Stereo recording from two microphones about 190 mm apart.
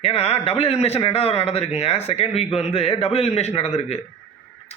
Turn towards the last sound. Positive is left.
turn(degrees=35)  # may be behind; listen again after turning